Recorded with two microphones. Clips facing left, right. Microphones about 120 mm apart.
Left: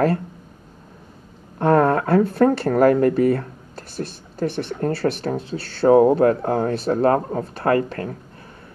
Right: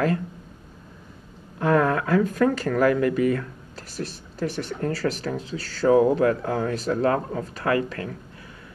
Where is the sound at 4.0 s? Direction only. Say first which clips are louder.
Left 4 dB; 50° left (ahead or behind).